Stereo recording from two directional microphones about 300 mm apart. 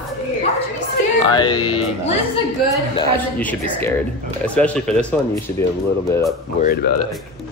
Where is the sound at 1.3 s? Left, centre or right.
Centre.